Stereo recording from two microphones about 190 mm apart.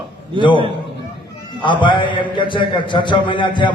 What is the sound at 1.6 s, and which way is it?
A man's voice, 25° left (ahead or behind).